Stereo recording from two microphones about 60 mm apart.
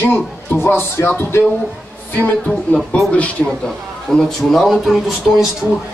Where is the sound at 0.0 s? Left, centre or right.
Left.